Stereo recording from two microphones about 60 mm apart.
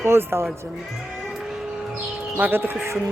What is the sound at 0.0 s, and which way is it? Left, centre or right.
Speech, right.